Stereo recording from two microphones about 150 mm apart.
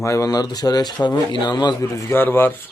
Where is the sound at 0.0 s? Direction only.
20° left (ahead or behind).